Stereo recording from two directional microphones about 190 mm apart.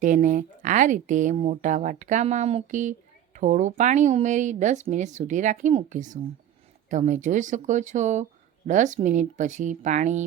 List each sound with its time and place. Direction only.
0.0 s speech: 40° right (ahead or behind)